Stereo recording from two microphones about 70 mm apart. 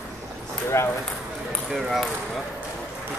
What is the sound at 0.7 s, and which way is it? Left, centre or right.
Speech, left.